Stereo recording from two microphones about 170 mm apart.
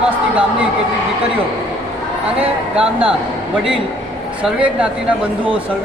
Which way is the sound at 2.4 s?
5° right (ahead or behind).